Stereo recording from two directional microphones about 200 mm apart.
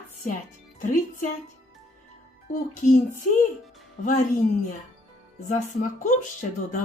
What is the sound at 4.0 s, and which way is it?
Speech, 40° left (ahead or behind).